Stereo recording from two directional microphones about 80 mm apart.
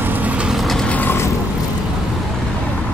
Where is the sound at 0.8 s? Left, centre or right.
Centre.